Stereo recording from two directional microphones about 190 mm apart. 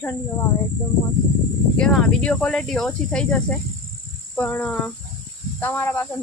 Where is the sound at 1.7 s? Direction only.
5° left (ahead or behind).